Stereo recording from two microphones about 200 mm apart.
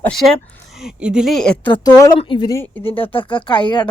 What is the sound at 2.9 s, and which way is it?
Speech, 25° left (ahead or behind).